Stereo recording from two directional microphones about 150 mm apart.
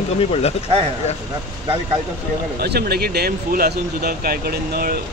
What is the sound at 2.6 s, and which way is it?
Speech, 90° right.